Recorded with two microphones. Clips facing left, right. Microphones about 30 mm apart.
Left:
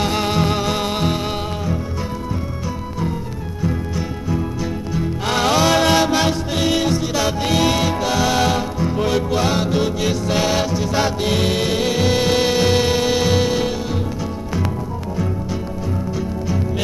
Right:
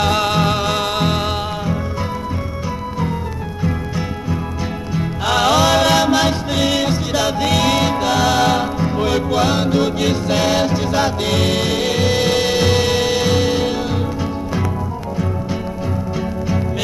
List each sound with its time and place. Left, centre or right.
0.2 s music: right
3.6 s music: right
5.5 s music: centre
16.2 s music: right